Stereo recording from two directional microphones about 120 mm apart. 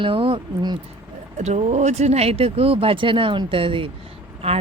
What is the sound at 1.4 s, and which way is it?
Speech, 65° right (ahead or behind).